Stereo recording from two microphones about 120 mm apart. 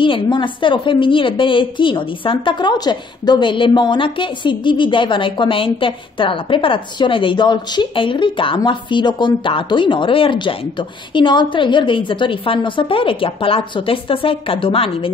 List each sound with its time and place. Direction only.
0.0 s a woman's voice: 45° left (ahead or behind)